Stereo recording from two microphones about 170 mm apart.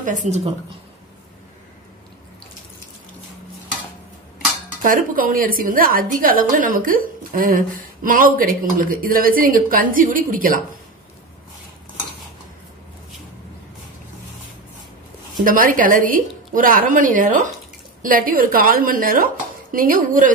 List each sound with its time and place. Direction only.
0.0 s a woman's voice: 45° right (ahead or behind)
4.8 s a woman's voice: 55° right (ahead or behind)
15.4 s a woman's voice: 55° right (ahead or behind)